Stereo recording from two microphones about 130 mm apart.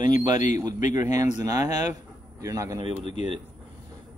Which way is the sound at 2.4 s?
25° right (ahead or behind).